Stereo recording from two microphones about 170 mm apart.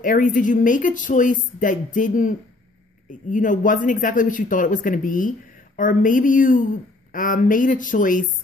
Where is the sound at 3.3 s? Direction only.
50° left (ahead or behind).